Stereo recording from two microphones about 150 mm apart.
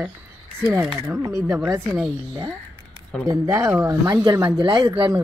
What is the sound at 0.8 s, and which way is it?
Speech, 5° right (ahead or behind).